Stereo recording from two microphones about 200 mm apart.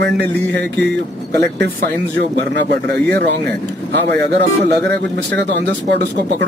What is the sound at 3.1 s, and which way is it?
Speech, 60° right (ahead or behind).